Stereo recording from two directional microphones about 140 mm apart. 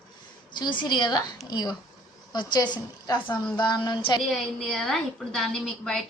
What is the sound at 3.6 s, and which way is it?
Speech, 30° left (ahead or behind).